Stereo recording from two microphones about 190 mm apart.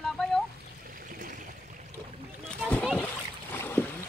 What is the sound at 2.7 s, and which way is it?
Splash, 5° left (ahead or behind).